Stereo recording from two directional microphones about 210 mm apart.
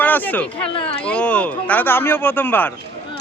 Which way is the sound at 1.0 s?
5° left (ahead or behind).